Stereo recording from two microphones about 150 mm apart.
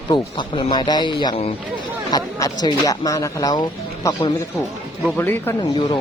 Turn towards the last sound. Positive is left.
turn(degrees=40)  # may be behind; listen again after turning